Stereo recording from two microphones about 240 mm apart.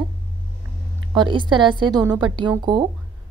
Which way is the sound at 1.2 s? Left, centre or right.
Centre.